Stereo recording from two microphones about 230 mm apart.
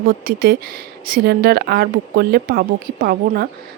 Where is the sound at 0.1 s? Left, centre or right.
Right.